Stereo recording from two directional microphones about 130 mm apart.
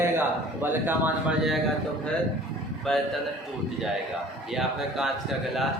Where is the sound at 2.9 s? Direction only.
5° left (ahead or behind).